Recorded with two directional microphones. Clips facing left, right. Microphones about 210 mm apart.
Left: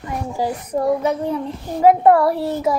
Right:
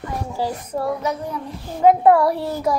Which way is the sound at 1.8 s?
5° left (ahead or behind).